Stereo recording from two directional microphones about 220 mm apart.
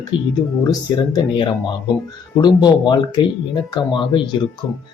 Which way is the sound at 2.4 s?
20° left (ahead or behind).